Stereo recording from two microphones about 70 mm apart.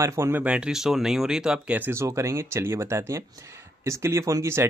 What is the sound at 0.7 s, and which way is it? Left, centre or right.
Speech, centre.